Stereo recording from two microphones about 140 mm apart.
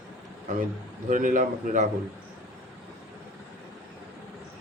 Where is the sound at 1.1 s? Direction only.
65° right (ahead or behind).